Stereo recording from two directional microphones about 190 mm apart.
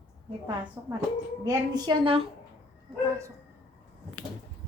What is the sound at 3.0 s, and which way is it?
Speech, 15° right (ahead or behind).